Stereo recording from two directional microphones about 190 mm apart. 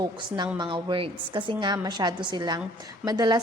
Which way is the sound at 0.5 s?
25° right (ahead or behind).